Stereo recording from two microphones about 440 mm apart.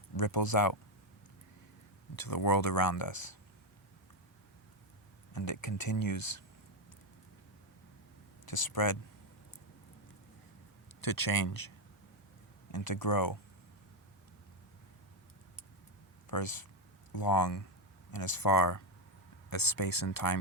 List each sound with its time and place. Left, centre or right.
0.2 s speech: left
2.1 s speech: left
5.3 s speech: left
8.4 s speech: left
11.0 s speech: left
12.7 s speech: left
16.3 s speech: left